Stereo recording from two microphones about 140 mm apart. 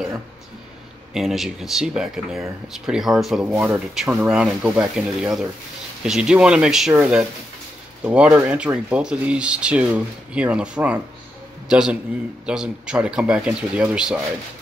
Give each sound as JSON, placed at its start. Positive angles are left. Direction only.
{"t": 1.1, "sound": "speech", "side_deg": 0}
{"t": 3.5, "sound": "speech", "side_deg": -15}
{"t": 3.9, "sound": "speech", "side_deg": -5}